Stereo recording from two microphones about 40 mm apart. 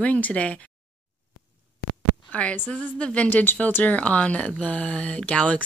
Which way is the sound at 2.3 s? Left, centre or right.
Left.